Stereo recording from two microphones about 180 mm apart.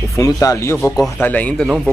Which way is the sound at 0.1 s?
20° left (ahead or behind).